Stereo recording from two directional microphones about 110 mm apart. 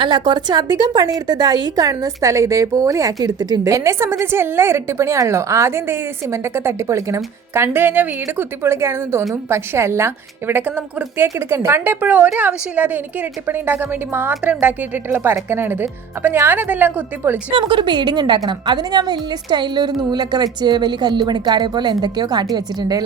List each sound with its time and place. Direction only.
0.0 s a woman's voice: 45° right (ahead or behind); by 17.3 s 15° right (ahead or behind)
17.5 s a woman's voice: 50° right (ahead or behind)